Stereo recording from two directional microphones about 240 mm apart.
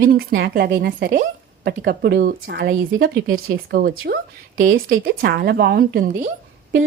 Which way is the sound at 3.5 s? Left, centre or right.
Right.